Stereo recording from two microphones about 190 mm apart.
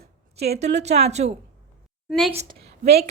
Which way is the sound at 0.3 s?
35° right (ahead or behind).